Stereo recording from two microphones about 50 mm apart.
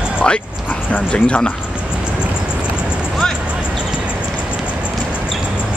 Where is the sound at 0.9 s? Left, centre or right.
Left.